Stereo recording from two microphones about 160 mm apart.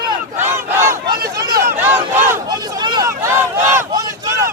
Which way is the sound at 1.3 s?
25° right (ahead or behind).